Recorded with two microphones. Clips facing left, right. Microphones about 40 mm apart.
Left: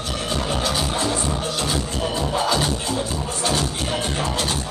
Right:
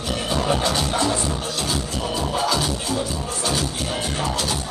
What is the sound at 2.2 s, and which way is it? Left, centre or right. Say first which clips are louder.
Music: left 1 dB; left.